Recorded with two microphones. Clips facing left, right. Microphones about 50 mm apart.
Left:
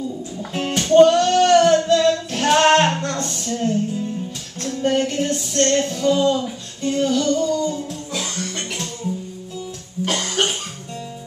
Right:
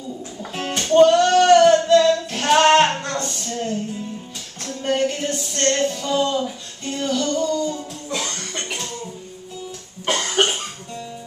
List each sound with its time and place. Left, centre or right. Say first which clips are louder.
0.4 s music: left 3 dB; centre
2.0 s child singing: right 2 dB; centre
2.8 s a sound: even; centre
4.6 s music: left 1 dB; centre
5.7 s music: right 3 dB; centre
5.9 s a sound: left 3 dB; centre
7.1 s music: right 1 dB; centre
10.0 s cough: right 2 dB; centre